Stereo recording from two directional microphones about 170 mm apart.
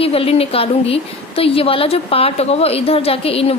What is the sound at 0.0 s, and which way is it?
A woman's voice, 35° left (ahead or behind).